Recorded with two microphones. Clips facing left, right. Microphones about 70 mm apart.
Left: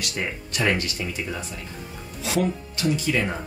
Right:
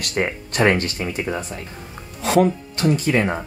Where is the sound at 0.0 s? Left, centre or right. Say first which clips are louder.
Right 6 dB; right.